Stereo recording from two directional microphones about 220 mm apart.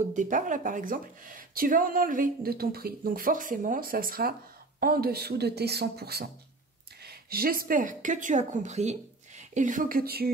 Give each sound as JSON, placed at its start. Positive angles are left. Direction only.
{"t": 0.1, "sound": "speech", "side_deg": -35}